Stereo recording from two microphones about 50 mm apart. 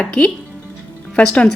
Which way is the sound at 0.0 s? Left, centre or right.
Centre.